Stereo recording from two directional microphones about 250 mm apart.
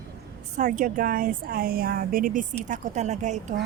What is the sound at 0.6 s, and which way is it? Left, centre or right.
Speech, right.